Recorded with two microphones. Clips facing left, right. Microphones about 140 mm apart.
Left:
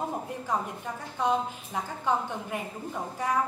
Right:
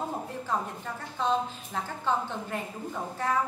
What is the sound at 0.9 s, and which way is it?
A woman's voice, 15° left (ahead or behind).